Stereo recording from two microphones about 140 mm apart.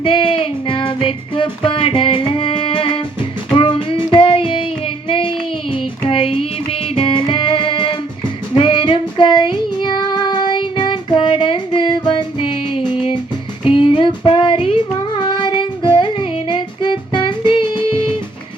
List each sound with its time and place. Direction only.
0.0 s child singing: 40° left (ahead or behind)
1.0 s music: 40° left (ahead or behind)
5.0 s child singing: 35° left (ahead or behind)
6.1 s music: 40° left (ahead or behind)
8.5 s child singing: 40° left (ahead or behind)
12.9 s music: 35° left (ahead or behind)
13.7 s child singing: 40° left (ahead or behind)